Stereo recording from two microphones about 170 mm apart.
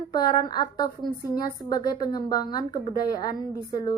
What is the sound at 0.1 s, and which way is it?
A woman's voice, 25° left (ahead or behind).